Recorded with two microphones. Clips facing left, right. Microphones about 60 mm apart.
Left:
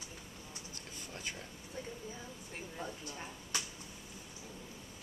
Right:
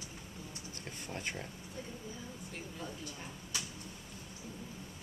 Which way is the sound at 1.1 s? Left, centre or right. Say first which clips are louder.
Right 4 dB; right.